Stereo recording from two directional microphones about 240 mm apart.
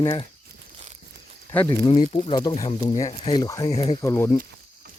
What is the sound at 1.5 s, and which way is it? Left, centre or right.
Speech, centre.